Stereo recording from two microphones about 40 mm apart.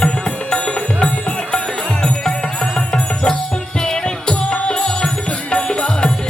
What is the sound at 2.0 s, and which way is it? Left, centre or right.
Music, centre.